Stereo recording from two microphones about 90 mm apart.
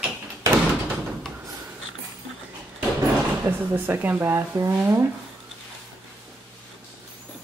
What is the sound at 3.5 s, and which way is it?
Speech, 20° right (ahead or behind).